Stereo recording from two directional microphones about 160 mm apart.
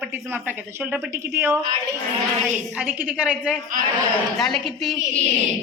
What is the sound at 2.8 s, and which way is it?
A woman's voice, 10° right (ahead or behind).